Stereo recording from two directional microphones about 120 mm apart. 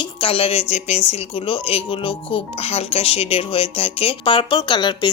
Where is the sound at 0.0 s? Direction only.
50° left (ahead or behind).